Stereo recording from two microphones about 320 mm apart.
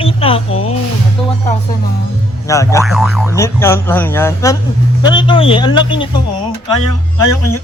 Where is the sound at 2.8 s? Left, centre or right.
Centre.